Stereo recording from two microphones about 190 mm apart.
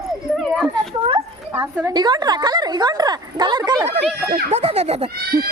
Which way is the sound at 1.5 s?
15° right (ahead or behind).